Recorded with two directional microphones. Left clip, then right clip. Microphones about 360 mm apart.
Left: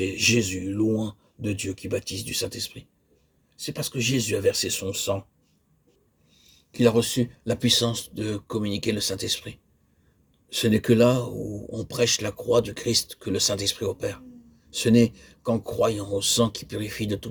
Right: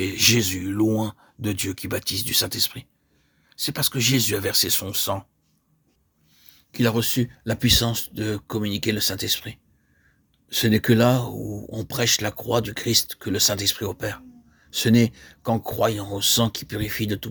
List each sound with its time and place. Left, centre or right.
0.0 s speech: right
6.4 s speech: right